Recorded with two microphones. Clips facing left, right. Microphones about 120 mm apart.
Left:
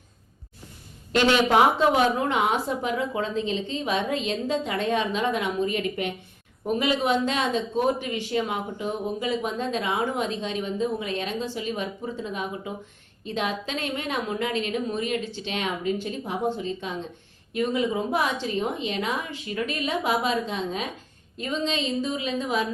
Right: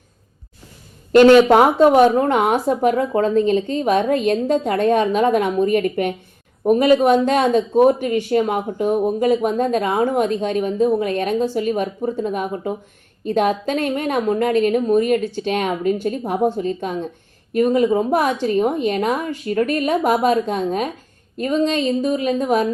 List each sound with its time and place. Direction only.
1.1 s speech: 45° right (ahead or behind)